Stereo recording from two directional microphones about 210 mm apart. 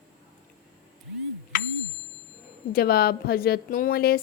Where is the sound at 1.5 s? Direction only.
40° left (ahead or behind).